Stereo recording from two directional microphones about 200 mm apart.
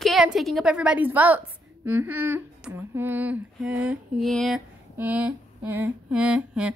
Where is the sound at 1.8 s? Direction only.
10° right (ahead or behind).